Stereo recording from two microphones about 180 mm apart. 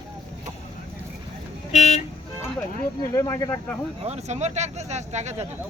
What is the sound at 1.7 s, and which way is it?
Speech, 40° left (ahead or behind).